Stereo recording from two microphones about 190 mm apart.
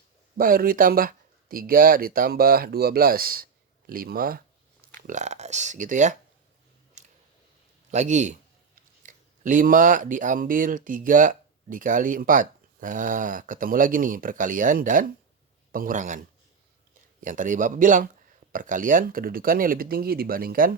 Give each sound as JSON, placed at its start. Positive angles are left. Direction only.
{"t": 0.3, "sound": "speech", "side_deg": -50}
{"t": 7.0, "sound": "a sound", "side_deg": -40}
{"t": 7.9, "sound": "speech", "side_deg": -40}